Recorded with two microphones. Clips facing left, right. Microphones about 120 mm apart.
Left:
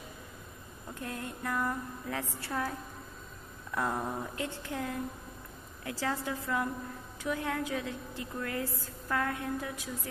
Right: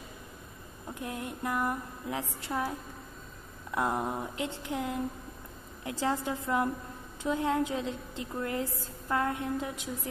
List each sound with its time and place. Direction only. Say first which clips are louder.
0.9 s a woman's voice: right 2 dB; 20° right (ahead or behind)
3.7 s a woman's voice: right 3 dB; 20° right (ahead or behind)